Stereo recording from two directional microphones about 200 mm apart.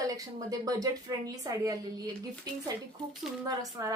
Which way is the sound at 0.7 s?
15° right (ahead or behind).